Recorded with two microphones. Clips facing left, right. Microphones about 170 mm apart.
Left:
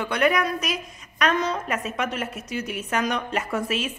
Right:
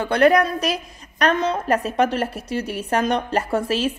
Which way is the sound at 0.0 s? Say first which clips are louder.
Right 6 dB; 35° right (ahead or behind).